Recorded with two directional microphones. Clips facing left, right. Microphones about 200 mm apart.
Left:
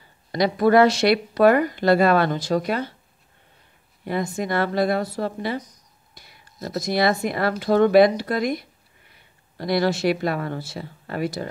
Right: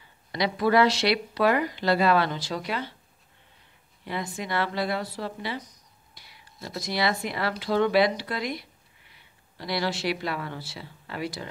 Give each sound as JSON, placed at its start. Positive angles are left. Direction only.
{"t": 0.3, "sound": "speech", "side_deg": 45}
{"t": 4.0, "sound": "speech", "side_deg": 45}